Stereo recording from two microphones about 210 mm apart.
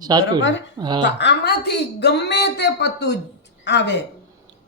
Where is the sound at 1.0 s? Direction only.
55° left (ahead or behind).